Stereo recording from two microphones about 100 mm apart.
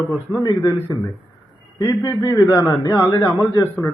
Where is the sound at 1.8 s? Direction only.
35° left (ahead or behind).